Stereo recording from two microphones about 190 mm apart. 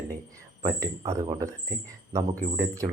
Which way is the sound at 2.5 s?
15° right (ahead or behind).